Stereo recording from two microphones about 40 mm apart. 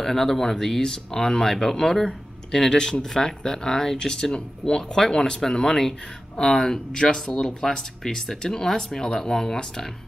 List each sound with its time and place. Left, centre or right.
0.0 s speech: centre